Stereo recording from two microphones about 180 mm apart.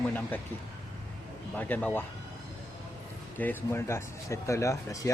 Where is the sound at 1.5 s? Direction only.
10° left (ahead or behind).